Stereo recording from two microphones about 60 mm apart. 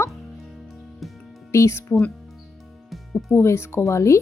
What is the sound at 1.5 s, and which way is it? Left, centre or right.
Speech, left.